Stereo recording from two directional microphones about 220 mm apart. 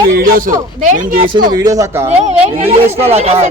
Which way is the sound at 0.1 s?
40° right (ahead or behind).